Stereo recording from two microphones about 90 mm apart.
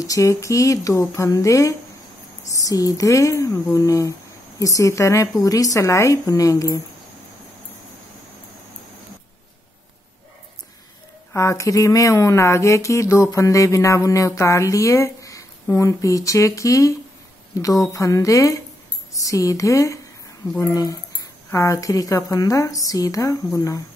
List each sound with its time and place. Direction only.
0.0 s speech: 40° left (ahead or behind)
11.3 s speech: 35° left (ahead or behind)